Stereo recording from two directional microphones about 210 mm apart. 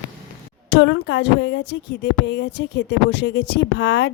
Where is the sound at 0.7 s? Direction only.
55° left (ahead or behind).